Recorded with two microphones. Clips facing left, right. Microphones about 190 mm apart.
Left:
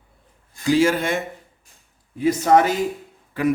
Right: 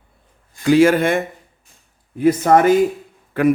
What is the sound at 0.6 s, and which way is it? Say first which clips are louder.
A man's voice: right 5 dB; 60° right (ahead or behind).